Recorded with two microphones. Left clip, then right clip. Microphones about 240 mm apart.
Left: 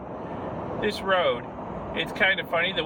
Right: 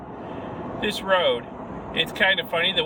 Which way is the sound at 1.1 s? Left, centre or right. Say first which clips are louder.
Right 3 dB; right.